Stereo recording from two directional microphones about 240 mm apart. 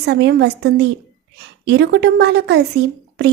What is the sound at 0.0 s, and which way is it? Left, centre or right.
A woman's voice, right.